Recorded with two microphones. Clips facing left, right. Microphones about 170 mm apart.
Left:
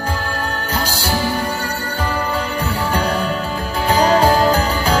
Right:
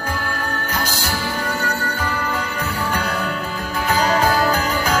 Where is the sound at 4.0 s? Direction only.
30° left (ahead or behind).